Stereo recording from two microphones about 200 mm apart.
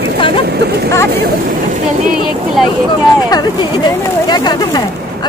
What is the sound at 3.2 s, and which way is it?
Speech, 20° left (ahead or behind).